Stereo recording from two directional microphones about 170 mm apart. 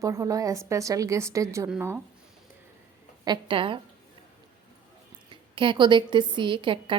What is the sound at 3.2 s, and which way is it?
Speech, 25° right (ahead or behind).